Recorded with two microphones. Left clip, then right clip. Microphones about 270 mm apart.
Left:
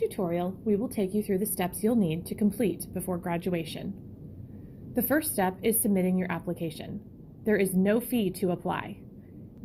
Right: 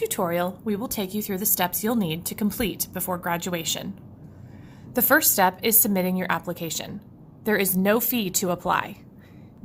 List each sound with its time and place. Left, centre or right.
0.0 s a woman's voice: right
4.9 s a woman's voice: centre